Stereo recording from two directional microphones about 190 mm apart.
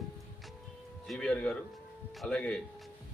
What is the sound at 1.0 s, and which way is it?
Speech, 5° left (ahead or behind).